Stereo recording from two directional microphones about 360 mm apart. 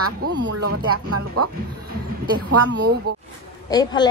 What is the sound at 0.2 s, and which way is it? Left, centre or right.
A woman's voice, right.